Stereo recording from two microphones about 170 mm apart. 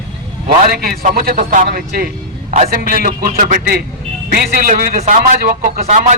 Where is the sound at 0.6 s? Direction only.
55° right (ahead or behind).